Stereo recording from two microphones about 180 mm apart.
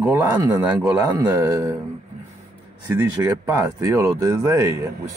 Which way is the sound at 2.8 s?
10° right (ahead or behind).